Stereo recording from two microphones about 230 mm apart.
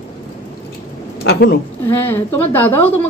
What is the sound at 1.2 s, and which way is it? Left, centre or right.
Speech, left.